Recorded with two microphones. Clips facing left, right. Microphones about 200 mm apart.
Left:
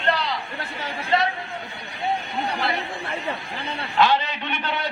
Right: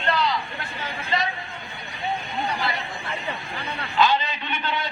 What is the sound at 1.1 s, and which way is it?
Speech, 60° left (ahead or behind).